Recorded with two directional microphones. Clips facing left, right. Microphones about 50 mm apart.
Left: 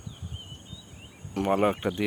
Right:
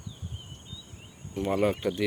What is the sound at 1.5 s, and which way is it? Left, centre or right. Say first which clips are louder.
Speech: left 2 dB; left.